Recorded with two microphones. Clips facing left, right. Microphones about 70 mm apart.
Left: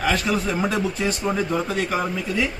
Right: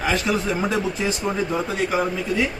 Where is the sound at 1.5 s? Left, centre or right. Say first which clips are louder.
Right 1 dB; centre.